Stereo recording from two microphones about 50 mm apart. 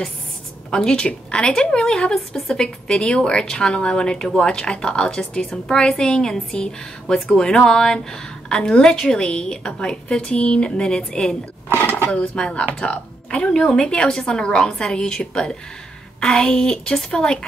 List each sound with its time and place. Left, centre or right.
0.7 s a woman's voice: centre
12.4 s a woman's voice: centre